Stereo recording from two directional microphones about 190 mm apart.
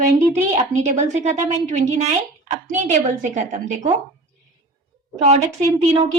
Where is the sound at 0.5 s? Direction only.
35° right (ahead or behind).